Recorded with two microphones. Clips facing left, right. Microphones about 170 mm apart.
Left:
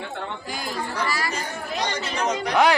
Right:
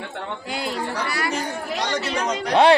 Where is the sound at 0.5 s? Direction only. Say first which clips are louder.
Right 4 dB; 65° right (ahead or behind).